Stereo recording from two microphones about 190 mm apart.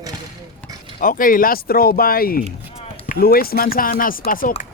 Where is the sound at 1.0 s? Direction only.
45° left (ahead or behind).